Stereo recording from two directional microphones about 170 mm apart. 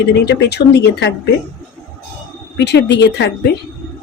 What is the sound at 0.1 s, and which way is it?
A woman's voice, 85° left.